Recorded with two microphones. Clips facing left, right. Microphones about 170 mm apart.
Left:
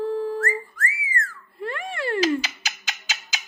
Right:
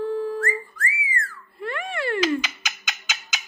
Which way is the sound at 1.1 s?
40° left (ahead or behind).